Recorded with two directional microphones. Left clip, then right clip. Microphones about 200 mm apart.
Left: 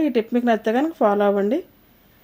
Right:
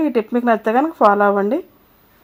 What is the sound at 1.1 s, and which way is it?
Speech, 40° right (ahead or behind).